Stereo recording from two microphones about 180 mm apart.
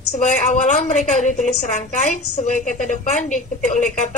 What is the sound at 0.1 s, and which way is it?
A woman's voice, 40° left (ahead or behind).